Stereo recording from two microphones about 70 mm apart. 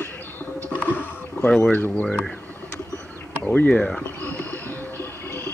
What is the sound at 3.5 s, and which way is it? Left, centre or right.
Speech, centre.